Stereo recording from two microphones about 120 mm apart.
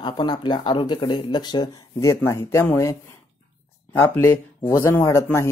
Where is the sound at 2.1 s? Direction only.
20° left (ahead or behind).